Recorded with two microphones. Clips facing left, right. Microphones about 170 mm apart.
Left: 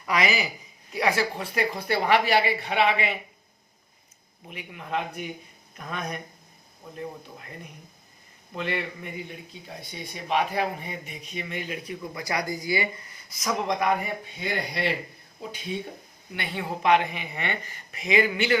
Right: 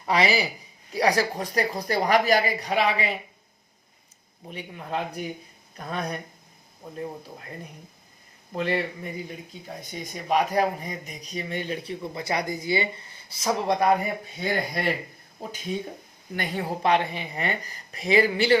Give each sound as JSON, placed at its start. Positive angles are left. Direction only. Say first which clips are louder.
{"t": 0.0, "sound": "speech", "louder": "right 3 dB", "side_deg": -30}
{"t": 4.4, "sound": "speech", "louder": "right 2 dB", "side_deg": -35}
{"t": 8.5, "sound": "speech", "louder": "right 4 dB", "side_deg": -35}